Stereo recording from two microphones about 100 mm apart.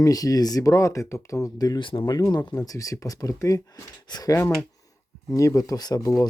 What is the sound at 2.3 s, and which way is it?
Speech, 40° left (ahead or behind).